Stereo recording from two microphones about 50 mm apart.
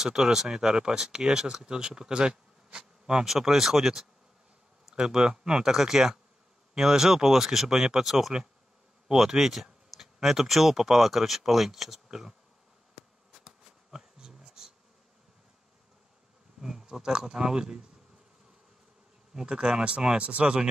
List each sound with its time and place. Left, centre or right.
0.0 s speech: centre
13.3 s bee: centre
16.6 s speech: centre
19.3 s speech: centre